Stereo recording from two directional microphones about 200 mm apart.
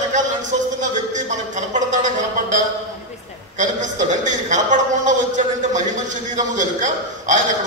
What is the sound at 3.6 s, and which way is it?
A man's voice, 40° right (ahead or behind).